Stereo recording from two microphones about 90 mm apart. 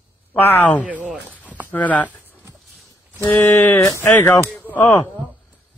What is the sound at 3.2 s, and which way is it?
Speech, 20° left (ahead or behind).